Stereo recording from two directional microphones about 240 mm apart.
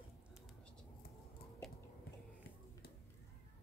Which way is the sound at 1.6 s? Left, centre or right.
Centre.